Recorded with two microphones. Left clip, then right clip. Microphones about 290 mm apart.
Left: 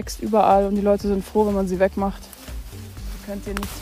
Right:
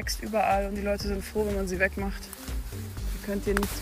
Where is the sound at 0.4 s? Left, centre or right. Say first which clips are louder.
Left 9 dB; left.